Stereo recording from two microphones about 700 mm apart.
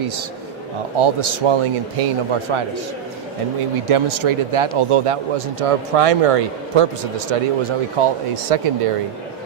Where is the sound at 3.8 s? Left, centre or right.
Right.